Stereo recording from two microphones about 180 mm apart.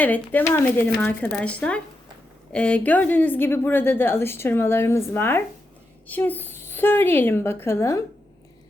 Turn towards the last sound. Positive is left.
turn(degrees=15)  # may be behind; listen again after turning